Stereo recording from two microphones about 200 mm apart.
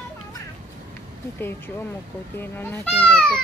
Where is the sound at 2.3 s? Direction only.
10° left (ahead or behind).